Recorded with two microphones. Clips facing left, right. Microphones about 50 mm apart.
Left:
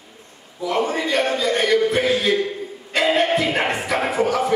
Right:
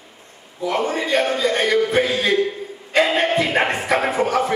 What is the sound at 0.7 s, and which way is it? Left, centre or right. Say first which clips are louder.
Speech: left 1 dB; centre.